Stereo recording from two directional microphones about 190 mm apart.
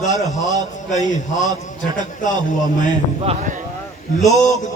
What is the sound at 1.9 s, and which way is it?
Speech, 40° left (ahead or behind).